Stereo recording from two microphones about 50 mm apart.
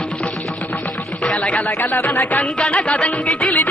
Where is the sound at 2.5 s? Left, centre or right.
Left.